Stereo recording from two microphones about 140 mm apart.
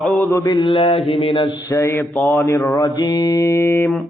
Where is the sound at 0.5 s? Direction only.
35° left (ahead or behind).